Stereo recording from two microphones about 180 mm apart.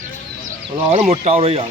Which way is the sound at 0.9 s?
30° right (ahead or behind).